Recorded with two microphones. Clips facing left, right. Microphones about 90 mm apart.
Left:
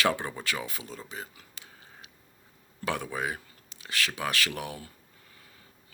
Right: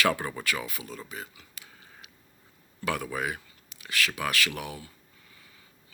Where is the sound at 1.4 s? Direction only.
35° left (ahead or behind).